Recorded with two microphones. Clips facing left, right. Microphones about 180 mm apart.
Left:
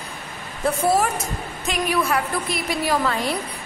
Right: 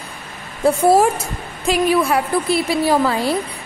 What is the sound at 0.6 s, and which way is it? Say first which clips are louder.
A woman's voice: right 7 dB; 25° right (ahead or behind).